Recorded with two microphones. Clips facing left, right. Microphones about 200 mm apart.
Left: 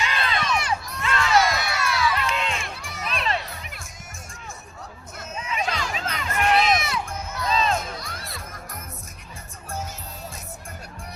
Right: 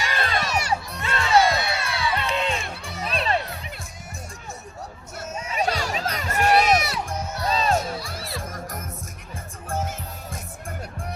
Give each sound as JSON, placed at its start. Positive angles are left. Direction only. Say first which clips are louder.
{"t": 0.1, "sound": "crowd", "louder": "right 1 dB", "side_deg": -45}
{"t": 5.3, "sound": "crowd", "louder": "right 3 dB", "side_deg": -40}
{"t": 7.9, "sound": "music", "louder": "right 4 dB", "side_deg": -5}
{"t": 9.6, "sound": "music", "louder": "right 5 dB", "side_deg": -55}